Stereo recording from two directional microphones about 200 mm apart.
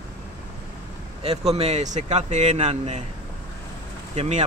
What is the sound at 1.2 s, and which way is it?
Speech, 30° right (ahead or behind).